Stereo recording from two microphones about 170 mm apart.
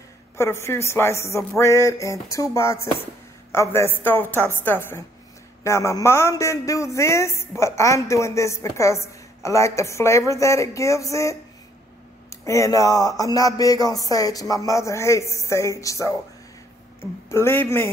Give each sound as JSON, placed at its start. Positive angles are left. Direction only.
{"t": 0.4, "sound": "a man's voice", "side_deg": 15}